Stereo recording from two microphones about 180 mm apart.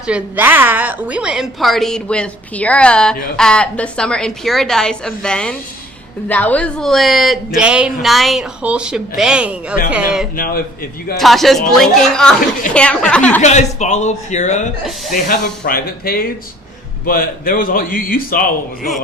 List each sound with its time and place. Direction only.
0.1 s a man's voice: 10° right (ahead or behind)
10.3 s a man's voice: 55° left (ahead or behind)
11.2 s a man's voice: centre (ahead or behind)
13.4 s a man's voice: 40° left (ahead or behind)
15.1 s a man's voice: 55° left (ahead or behind)